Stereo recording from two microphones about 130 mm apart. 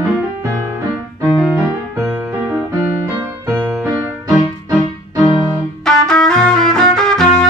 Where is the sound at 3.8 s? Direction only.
20° right (ahead or behind).